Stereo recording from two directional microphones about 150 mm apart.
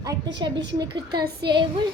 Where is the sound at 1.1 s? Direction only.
90° right.